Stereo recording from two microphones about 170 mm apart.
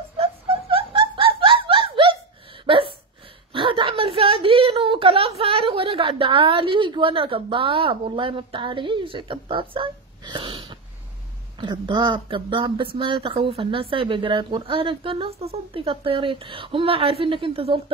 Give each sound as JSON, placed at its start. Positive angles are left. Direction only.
{"t": 0.2, "sound": "laughter", "side_deg": -35}
{"t": 2.6, "sound": "a sound", "side_deg": -30}
{"t": 3.5, "sound": "whimper", "side_deg": -30}
{"t": 11.6, "sound": "speech", "side_deg": -25}